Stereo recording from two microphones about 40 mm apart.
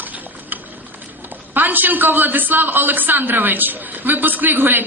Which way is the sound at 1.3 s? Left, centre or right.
Right.